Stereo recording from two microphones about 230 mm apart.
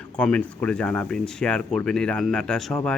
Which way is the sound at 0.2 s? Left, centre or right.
Centre.